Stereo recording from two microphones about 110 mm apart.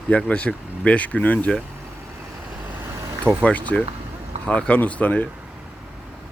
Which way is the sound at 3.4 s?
10° left (ahead or behind).